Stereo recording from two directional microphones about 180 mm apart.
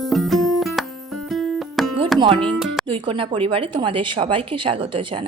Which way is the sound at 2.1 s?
30° right (ahead or behind).